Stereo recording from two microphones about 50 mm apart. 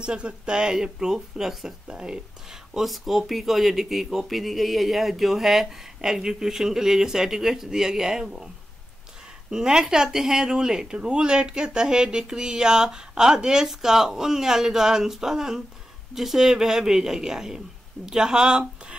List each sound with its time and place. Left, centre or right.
0.0 s speech: centre
2.7 s speech: centre
9.5 s speech: centre